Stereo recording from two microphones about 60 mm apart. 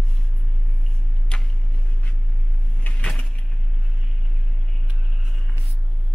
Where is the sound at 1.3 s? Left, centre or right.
Centre.